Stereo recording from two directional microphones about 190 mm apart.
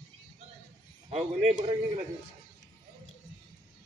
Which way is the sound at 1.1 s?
30° right (ahead or behind).